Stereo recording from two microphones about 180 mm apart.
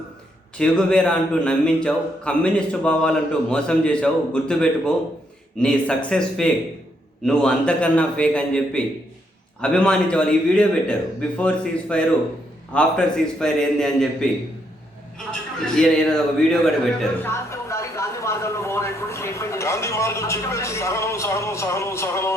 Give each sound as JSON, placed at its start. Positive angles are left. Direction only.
{"t": 0.6, "sound": "a man's voice", "side_deg": 5}
{"t": 15.3, "sound": "a man's voice", "side_deg": 5}
{"t": 17.0, "sound": "speech", "side_deg": 15}